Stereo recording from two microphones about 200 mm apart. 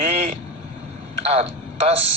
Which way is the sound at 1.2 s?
30° right (ahead or behind).